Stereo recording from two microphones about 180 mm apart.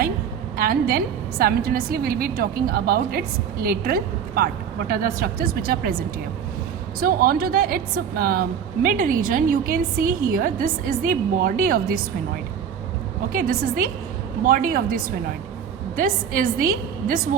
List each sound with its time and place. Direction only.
0.5 s a woman's voice: 55° right (ahead or behind)
7.0 s a woman's voice: 55° right (ahead or behind)
13.3 s a woman's voice: 55° right (ahead or behind)